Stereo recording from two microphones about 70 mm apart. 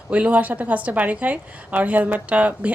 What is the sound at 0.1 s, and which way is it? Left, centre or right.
A woman's voice, centre.